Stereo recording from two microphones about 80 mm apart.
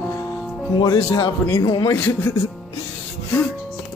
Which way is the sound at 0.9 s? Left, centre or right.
Left.